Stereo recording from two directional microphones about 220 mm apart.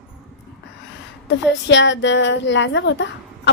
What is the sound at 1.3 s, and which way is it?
A woman's voice, 50° left (ahead or behind).